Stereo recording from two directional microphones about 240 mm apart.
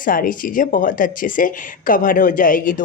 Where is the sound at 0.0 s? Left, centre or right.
Left.